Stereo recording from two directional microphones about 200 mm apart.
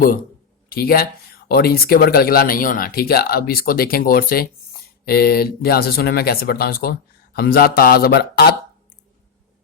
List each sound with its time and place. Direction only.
0.7 s speech: 50° left (ahead or behind)